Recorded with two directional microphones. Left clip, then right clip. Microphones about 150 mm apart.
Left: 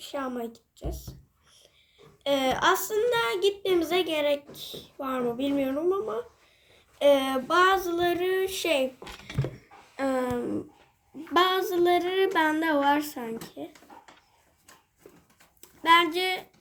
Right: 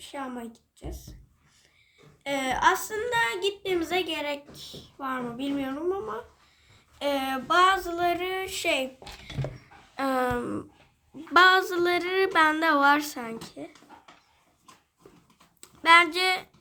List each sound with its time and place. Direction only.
2.2 s a woman's voice: 10° right (ahead or behind)
7.0 s child singing: 15° right (ahead or behind)
10.0 s a sound: 40° right (ahead or behind)
15.6 s speech: 30° right (ahead or behind)